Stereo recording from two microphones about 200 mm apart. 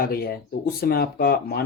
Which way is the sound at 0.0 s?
50° left (ahead or behind).